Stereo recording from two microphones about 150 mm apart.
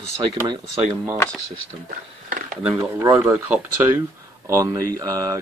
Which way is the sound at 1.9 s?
65° right (ahead or behind).